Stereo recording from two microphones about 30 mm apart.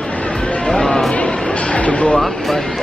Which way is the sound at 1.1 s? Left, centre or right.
Left.